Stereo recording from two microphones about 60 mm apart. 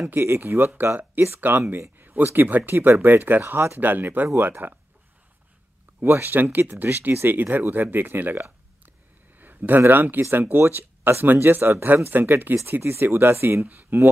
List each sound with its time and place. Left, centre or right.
0.1 s speech: right
5.9 s speech: right
8.4 s a sound: right
9.4 s speech: right